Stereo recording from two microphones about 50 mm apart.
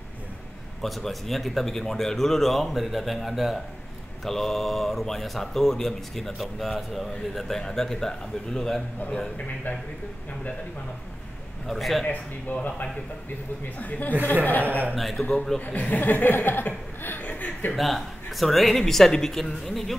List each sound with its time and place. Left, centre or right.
0.8 s speech: centre
11.6 s speech: centre
12.1 s speech: left
15.0 s speech: centre
15.6 s speech: left
17.7 s speech: centre